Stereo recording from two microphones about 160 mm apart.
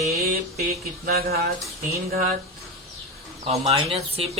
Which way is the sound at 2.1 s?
65° right (ahead or behind).